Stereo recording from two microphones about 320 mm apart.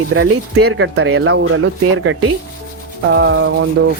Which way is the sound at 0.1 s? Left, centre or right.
Right.